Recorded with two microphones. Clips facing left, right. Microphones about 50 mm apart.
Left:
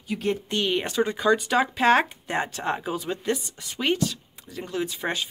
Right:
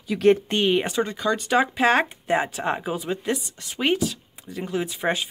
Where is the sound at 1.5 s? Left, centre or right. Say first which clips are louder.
Right 4 dB; centre.